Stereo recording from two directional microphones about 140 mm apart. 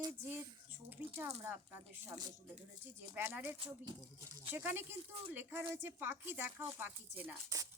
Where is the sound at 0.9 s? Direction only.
15° right (ahead or behind).